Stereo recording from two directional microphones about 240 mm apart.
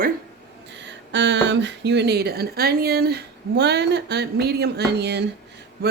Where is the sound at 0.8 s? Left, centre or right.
Right.